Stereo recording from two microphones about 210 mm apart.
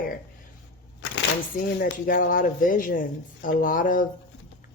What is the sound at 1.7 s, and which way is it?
Speech, 45° left (ahead or behind).